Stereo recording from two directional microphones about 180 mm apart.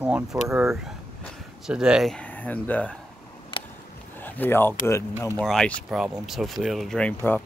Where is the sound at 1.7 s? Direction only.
5° right (ahead or behind).